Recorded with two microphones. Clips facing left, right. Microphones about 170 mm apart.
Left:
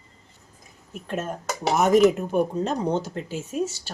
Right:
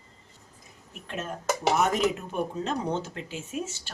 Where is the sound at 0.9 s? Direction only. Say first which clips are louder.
Left 6 dB; 45° left (ahead or behind).